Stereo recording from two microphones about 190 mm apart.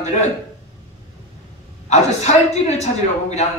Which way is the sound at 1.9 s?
35° left (ahead or behind).